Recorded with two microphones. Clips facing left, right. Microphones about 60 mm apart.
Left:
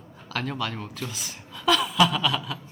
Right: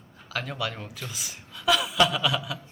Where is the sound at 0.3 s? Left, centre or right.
Centre.